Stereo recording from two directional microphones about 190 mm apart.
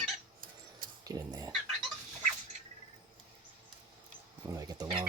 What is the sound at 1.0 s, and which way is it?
Dog, 20° right (ahead or behind).